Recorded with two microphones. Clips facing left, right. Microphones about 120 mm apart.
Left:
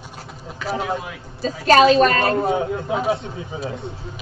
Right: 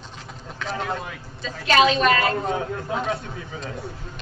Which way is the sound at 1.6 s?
40° left (ahead or behind).